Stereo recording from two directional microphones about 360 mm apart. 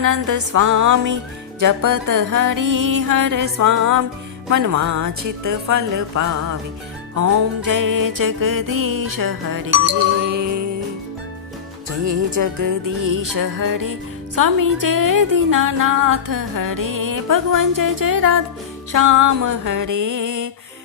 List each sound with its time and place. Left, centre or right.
0.0 s speech: right
11.9 s speech: right
18.9 s speech: right